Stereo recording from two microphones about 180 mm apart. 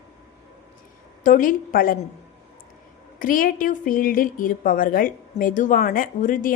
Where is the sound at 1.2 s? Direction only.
50° left (ahead or behind).